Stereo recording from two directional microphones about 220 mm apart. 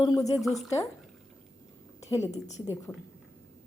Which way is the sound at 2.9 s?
10° left (ahead or behind).